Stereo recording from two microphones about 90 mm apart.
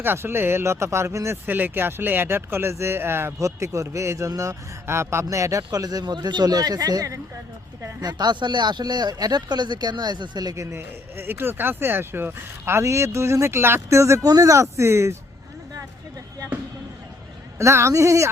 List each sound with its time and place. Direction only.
0.0 s speech: 25° right (ahead or behind)
1.5 s speech: 20° right (ahead or behind)
17.6 s speech: 30° right (ahead or behind)